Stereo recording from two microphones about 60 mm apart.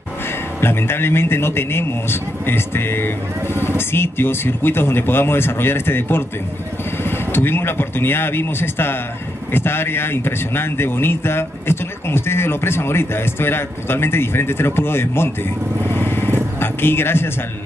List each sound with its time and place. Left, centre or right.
0.6 s speech: left
15.9 s vehicle: left
16.5 s speech: left